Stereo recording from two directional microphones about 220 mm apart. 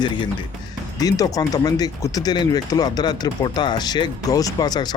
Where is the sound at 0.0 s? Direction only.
20° left (ahead or behind).